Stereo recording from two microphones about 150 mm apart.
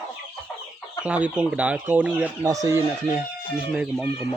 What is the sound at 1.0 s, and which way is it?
Speech, 10° right (ahead or behind).